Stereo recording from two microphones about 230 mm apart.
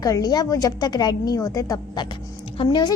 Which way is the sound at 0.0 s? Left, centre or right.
Centre.